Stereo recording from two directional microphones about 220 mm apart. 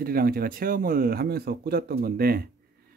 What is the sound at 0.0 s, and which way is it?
Speech, 45° right (ahead or behind).